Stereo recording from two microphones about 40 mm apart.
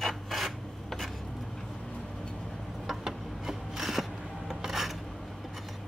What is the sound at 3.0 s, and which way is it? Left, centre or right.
Filing, centre.